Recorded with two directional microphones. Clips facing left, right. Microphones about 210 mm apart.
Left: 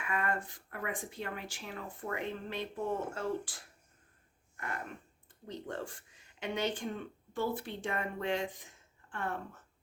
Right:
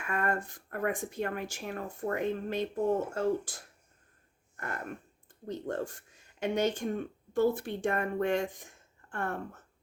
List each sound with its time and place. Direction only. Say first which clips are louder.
0.0 s speech: right 3 dB; 45° right (ahead or behind)
4.5 s a sound: right 2 dB; 45° right (ahead or behind)
5.5 s speech: right 6 dB; 45° right (ahead or behind)